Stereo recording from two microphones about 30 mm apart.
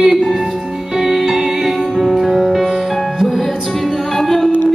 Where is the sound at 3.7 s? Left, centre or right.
Centre.